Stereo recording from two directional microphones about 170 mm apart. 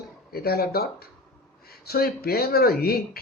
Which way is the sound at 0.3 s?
65° left (ahead or behind).